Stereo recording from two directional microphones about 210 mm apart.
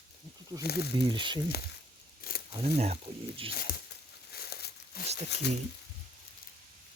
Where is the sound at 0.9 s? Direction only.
25° right (ahead or behind).